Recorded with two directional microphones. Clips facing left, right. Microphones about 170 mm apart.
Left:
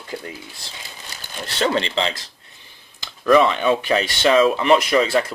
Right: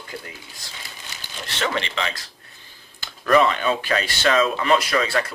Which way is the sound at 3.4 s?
15° left (ahead or behind).